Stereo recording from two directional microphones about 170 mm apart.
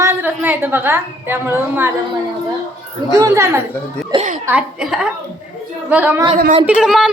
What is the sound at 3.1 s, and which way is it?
Speech, 20° right (ahead or behind).